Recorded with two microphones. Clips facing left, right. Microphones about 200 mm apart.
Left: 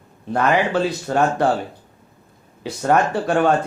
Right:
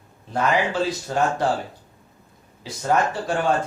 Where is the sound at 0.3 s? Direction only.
60° left (ahead or behind).